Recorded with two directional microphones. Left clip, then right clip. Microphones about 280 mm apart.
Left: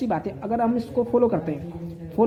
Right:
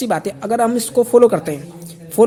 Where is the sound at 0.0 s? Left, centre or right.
Right.